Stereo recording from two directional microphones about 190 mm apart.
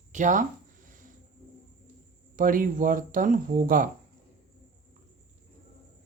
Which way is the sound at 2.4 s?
45° right (ahead or behind).